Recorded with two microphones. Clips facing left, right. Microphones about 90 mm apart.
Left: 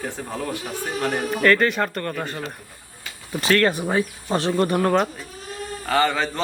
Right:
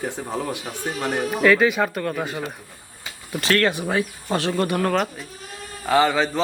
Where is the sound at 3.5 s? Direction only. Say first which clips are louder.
Left 1 dB; 30° left (ahead or behind).